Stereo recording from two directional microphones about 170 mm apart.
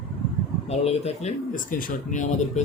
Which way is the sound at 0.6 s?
40° left (ahead or behind).